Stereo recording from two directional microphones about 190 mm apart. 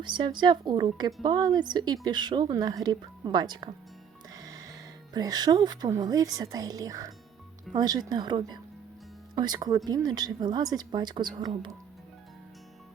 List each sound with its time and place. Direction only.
0.0 s a woman's voice: 25° right (ahead or behind)
4.4 s music: 20° right (ahead or behind)
5.1 s a woman's voice: 20° right (ahead or behind)